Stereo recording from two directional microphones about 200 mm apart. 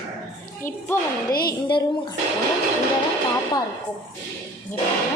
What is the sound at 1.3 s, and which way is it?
Speech, 50° left (ahead or behind).